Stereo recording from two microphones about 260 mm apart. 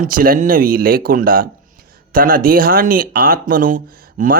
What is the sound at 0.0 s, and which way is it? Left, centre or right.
Speech, right.